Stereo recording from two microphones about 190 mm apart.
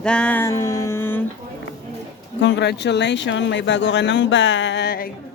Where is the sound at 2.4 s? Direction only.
65° left (ahead or behind).